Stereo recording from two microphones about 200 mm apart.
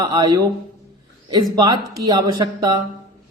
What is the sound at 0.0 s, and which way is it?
Speech, 20° right (ahead or behind).